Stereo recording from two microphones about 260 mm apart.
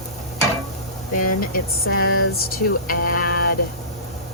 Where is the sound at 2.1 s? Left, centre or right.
Left.